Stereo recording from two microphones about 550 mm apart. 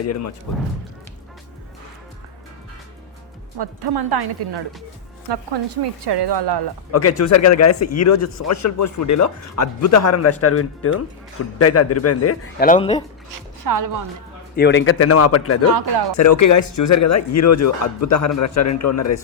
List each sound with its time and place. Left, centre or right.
0.0 s a man's voice: left
3.6 s a woman's voice: right
6.9 s a man's voice: left; by 13.1 s centre
13.3 s speech: right
14.5 s a man's voice: centre